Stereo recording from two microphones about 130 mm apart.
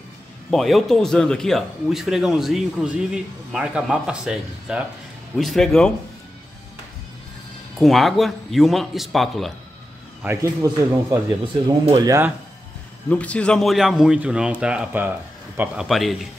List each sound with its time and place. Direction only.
0.5 s speech: centre (ahead or behind)
7.8 s speech: centre (ahead or behind)
10.2 s a man's voice: 20° right (ahead or behind)
13.1 s speech: 10° left (ahead or behind)